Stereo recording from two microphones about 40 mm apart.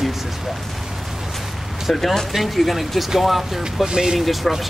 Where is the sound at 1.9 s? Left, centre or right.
Centre.